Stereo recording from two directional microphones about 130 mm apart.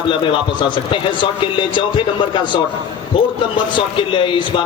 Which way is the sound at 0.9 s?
40° left (ahead or behind).